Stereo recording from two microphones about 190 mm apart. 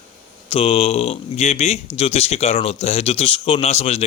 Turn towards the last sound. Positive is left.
turn(degrees=35)  # may be behind; listen again after turning